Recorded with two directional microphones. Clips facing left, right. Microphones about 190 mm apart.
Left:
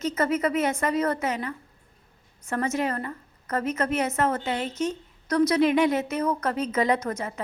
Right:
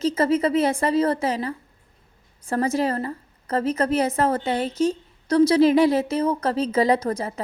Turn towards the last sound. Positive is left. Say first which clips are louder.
# right 4 dB
turn(degrees=-35)  # may be behind; listen again after turning